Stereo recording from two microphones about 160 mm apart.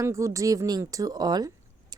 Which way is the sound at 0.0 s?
20° right (ahead or behind).